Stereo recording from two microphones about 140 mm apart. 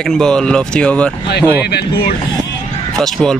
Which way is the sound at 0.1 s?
5° left (ahead or behind).